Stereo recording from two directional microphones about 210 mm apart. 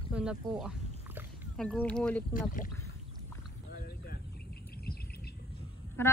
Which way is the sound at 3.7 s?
45° left (ahead or behind).